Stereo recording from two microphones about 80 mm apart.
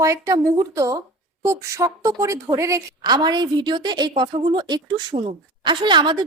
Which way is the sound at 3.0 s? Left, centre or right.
Right.